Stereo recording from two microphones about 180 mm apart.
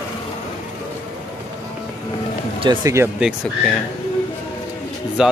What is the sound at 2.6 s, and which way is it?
Speech, 20° right (ahead or behind).